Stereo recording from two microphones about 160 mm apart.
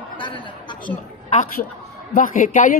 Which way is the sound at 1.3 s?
50° left (ahead or behind).